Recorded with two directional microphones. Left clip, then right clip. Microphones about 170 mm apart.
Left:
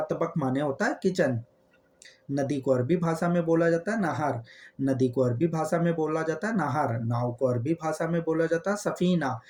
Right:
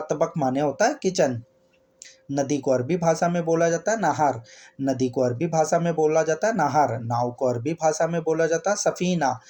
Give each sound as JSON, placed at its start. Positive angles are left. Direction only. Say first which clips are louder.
{"t": 0.1, "sound": "speech", "louder": "right 5 dB", "side_deg": -25}
{"t": 2.3, "sound": "speech", "louder": "right 4 dB", "side_deg": -30}